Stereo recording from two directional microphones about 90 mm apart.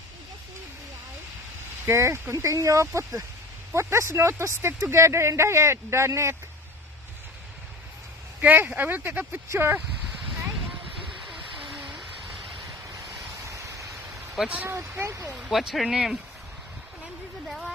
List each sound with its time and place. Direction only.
1.9 s speech: 30° right (ahead or behind)
8.4 s speech: 20° right (ahead or behind)
11.2 s a sound: 5° right (ahead or behind)
13.1 s a sound: 35° right (ahead or behind)
14.3 s speech: 5° right (ahead or behind)
14.7 s speech: 35° right (ahead or behind)
15.3 s speech: 5° right (ahead or behind)